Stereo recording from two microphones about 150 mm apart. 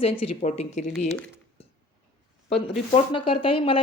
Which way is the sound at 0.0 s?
40° left (ahead or behind).